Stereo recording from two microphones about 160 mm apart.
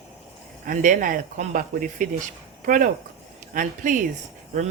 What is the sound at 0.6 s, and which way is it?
Speech, 50° right (ahead or behind).